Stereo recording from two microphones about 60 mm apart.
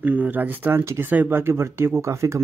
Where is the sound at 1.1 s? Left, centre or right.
Right.